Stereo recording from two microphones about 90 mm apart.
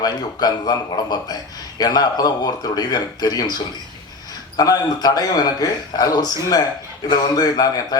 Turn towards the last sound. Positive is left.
turn(degrees=45)  # may be behind; listen again after turning